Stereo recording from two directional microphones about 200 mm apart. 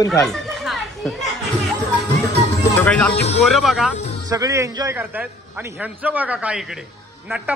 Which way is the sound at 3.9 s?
35° left (ahead or behind).